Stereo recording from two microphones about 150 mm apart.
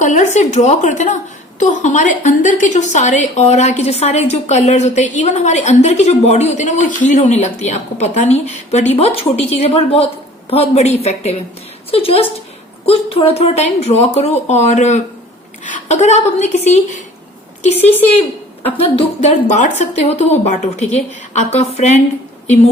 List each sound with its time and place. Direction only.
0.0 s a woman's voice: 55° left (ahead or behind)
17.7 s a woman's voice: 10° left (ahead or behind)
18.8 s speech: 40° left (ahead or behind)
19.3 s a woman's voice: 55° left (ahead or behind)